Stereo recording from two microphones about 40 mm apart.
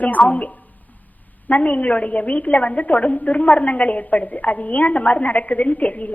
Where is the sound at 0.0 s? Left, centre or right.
Left.